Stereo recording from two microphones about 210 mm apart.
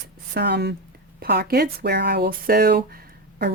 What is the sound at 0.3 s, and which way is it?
Speech, 50° right (ahead or behind).